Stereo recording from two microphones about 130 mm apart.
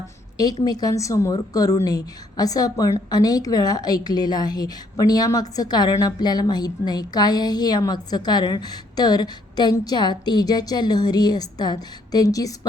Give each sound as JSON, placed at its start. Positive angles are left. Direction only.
{"t": 0.3, "sound": "a woman's voice", "side_deg": 30}